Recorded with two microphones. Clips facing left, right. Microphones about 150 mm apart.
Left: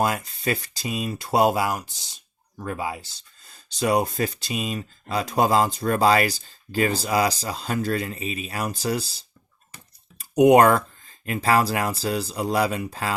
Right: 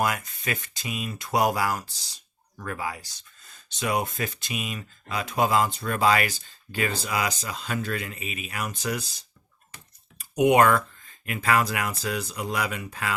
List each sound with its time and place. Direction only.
0.0 s speech: 30° left (ahead or behind)